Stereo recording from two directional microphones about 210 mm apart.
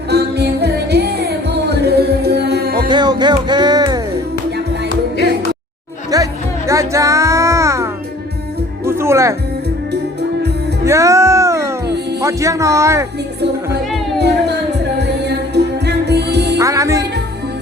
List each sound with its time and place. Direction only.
0.1 s music: 50° right (ahead or behind)
2.8 s music: 20° right (ahead or behind)
6.1 s music: 15° right (ahead or behind)
9.9 s music: 50° right (ahead or behind)
10.8 s music: 15° right (ahead or behind)
12.2 s speech: 15° right (ahead or behind)
14.2 s music: 50° right (ahead or behind)
16.6 s music: 15° right (ahead or behind)